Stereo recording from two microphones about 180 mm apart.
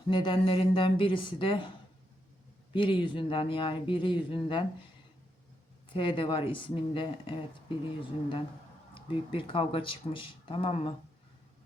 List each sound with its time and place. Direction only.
0.1 s speech: 25° left (ahead or behind)
2.7 s speech: 25° left (ahead or behind)
5.9 s speech: 30° left (ahead or behind)